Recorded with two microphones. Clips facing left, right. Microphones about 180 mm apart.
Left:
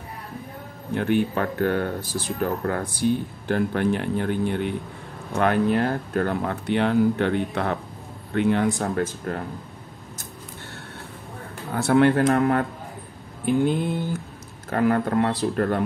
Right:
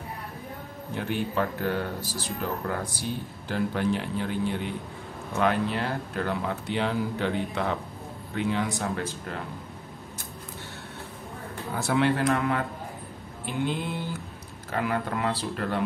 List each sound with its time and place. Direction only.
0.9 s speech: 60° left (ahead or behind)
11.7 s speech: 55° left (ahead or behind)